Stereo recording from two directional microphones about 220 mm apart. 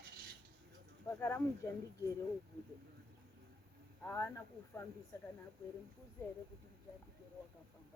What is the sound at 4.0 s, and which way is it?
Speech, 10° left (ahead or behind).